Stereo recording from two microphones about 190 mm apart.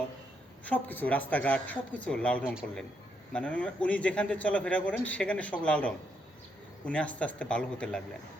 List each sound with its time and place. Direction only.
0.6 s speech: 10° left (ahead or behind)
2.4 s speech: 5° right (ahead or behind)
3.3 s speech: 5° left (ahead or behind)